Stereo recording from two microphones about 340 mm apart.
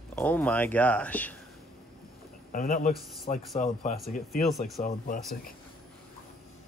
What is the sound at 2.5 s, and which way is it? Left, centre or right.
Speech, left.